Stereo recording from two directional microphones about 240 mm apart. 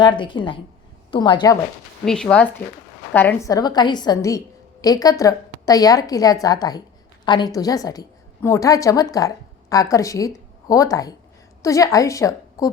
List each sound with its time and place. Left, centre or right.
0.0 s a woman's voice: centre
2.0 s a woman's voice: centre